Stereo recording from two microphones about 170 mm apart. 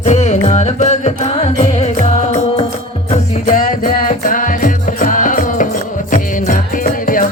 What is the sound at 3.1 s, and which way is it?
Music, 45° left (ahead or behind).